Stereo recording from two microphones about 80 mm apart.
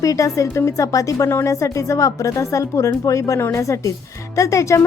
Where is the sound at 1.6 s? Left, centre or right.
Left.